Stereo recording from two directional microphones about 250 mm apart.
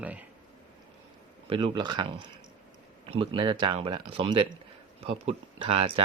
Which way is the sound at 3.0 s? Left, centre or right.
Centre.